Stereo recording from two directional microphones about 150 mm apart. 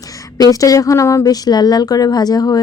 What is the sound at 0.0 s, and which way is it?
Speech, 20° left (ahead or behind).